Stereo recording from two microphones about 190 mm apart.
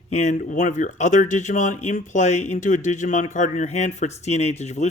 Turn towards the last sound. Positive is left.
turn(degrees=35)  # may be behind; listen again after turning